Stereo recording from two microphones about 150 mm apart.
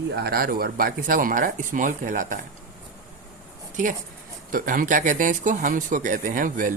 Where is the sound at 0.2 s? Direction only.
85° right; by 2.4 s 60° right (ahead or behind).